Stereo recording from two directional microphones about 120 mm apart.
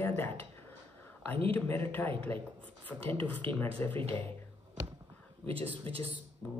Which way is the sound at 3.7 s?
15° left (ahead or behind).